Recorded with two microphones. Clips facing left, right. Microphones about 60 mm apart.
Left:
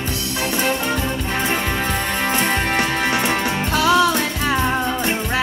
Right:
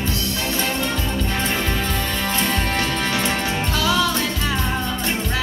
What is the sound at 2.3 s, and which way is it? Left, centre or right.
Music, left.